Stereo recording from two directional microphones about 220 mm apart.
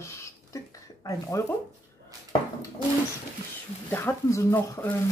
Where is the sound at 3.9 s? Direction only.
10° left (ahead or behind).